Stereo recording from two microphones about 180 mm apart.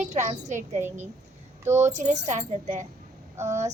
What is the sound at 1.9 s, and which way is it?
Speech, 40° right (ahead or behind).